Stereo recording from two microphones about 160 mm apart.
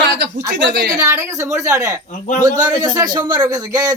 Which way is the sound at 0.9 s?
15° right (ahead or behind).